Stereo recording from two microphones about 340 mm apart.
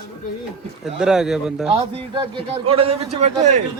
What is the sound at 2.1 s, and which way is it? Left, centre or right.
A man's voice, centre.